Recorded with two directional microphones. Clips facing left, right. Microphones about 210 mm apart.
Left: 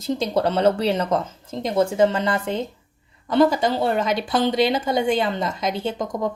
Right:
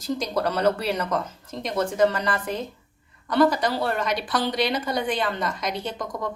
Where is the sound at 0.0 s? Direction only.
25° left (ahead or behind).